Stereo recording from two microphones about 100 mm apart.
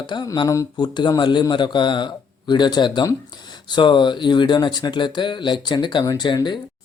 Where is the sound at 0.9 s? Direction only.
50° left (ahead or behind).